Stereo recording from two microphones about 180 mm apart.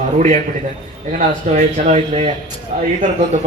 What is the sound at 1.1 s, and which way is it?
Speech, 40° right (ahead or behind).